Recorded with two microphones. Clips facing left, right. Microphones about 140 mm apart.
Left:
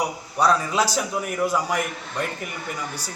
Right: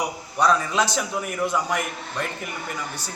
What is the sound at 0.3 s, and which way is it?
A man's voice, 5° left (ahead or behind).